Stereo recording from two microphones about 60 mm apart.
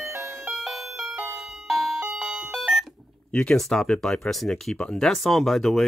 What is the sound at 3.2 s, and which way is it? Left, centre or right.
Speech, centre.